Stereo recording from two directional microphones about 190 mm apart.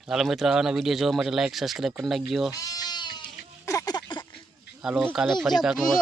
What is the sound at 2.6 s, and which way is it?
Goat, 20° left (ahead or behind).